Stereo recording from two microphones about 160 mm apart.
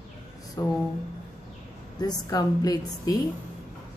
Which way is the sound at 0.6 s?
20° left (ahead or behind).